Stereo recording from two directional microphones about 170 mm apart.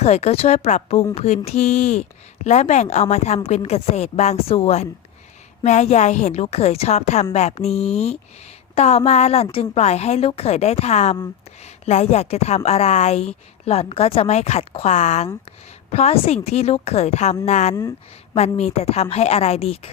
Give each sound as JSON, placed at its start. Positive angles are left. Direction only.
{"t": 0.0, "sound": "a woman's voice", "side_deg": 40}